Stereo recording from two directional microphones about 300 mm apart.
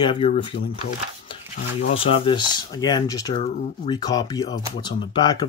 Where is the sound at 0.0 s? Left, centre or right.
Centre.